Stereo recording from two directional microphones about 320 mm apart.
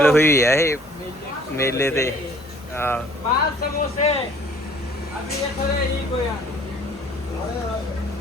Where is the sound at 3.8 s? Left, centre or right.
Centre.